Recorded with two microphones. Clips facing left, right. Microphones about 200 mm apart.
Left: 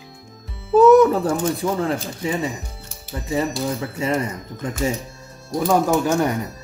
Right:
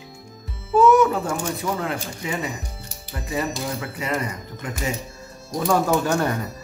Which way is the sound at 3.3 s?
25° left (ahead or behind).